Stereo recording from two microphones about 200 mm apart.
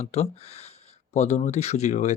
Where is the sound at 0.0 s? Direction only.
30° left (ahead or behind).